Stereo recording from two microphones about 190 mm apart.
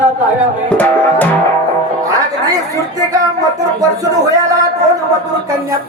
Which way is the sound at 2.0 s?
20° right (ahead or behind).